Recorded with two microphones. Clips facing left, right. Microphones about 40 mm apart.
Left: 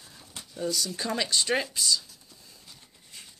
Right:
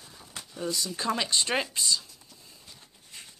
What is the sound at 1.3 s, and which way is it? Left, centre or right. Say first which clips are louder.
Speech: left 1 dB; right.